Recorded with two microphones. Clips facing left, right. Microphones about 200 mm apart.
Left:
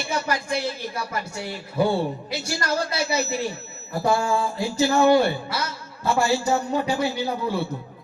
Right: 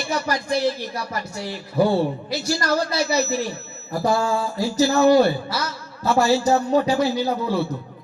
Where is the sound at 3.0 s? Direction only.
30° left (ahead or behind).